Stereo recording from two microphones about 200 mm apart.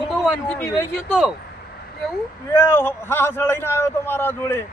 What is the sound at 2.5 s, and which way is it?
A man's voice, 10° left (ahead or behind).